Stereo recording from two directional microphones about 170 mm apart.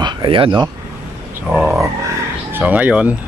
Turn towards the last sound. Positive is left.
turn(degrees=-10)  # may be behind; listen again after turning